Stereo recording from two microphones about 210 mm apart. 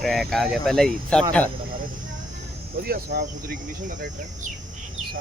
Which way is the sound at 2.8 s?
45° right (ahead or behind).